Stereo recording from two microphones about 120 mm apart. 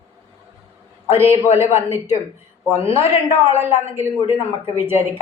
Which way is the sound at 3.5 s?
20° right (ahead or behind).